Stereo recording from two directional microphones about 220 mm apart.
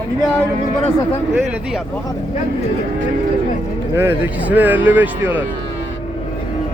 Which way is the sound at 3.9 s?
10° right (ahead or behind).